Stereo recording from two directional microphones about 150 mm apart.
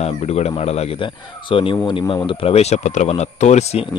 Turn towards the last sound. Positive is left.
turn(degrees=45)  # may be behind; listen again after turning